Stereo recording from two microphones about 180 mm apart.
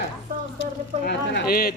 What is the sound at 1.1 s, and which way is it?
Speech, 65° left (ahead or behind).